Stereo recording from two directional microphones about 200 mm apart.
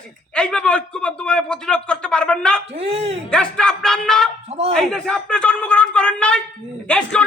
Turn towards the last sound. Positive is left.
turn(degrees=5)  # may be behind; listen again after turning